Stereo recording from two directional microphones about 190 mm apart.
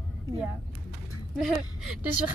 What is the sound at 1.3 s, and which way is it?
Speech, centre (ahead or behind).